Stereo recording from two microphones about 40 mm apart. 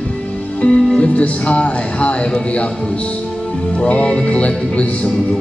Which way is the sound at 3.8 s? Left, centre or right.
Left.